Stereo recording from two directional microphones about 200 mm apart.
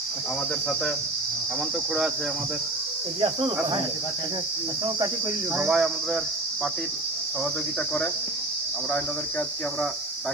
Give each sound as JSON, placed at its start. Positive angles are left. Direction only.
{"t": 3.2, "sound": "cricket", "side_deg": -25}
{"t": 5.5, "sound": "speech", "side_deg": 0}